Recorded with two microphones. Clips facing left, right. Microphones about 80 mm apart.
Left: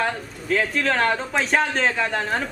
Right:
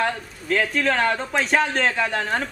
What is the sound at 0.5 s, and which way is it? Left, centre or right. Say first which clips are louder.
A man's voice: even; centre.